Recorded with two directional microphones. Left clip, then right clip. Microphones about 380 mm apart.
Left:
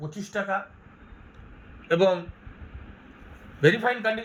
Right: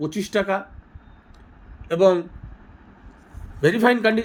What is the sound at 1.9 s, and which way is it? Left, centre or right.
Speech, right.